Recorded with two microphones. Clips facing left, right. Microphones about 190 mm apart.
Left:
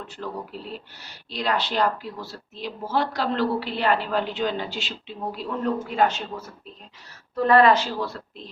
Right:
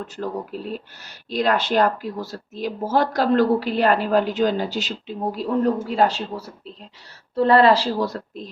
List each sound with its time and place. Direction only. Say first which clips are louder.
0.5 s speech: right 6 dB; 45° right (ahead or behind)